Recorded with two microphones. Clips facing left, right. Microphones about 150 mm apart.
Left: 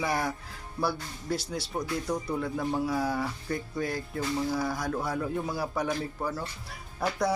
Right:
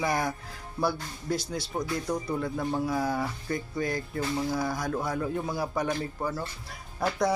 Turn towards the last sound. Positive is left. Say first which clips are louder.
# right 1 dB
turn(degrees=10)  # may be behind; listen again after turning